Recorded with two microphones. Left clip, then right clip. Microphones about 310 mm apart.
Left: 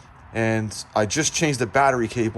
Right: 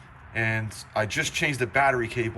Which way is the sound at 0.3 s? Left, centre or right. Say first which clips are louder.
Left 4 dB; centre.